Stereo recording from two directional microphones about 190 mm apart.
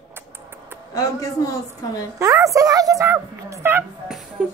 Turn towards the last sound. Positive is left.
turn(degrees=-5)  # may be behind; listen again after turning